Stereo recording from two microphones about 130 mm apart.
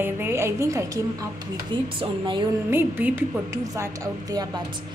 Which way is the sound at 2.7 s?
15° right (ahead or behind).